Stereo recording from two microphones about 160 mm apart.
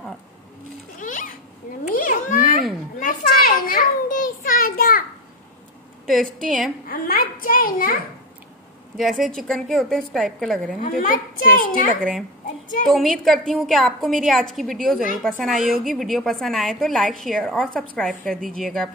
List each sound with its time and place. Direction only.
0.9 s cat: 55° left (ahead or behind)
2.0 s babbling: 55° left (ahead or behind)
3.0 s a sound: 60° left (ahead or behind)
6.0 s a woman's voice: centre (ahead or behind)
6.9 s a sound: 60° left (ahead or behind)
8.9 s a woman's voice: centre (ahead or behind)
11.0 s a child's voice: 60° left (ahead or behind)
12.0 s a woman's voice: centre (ahead or behind)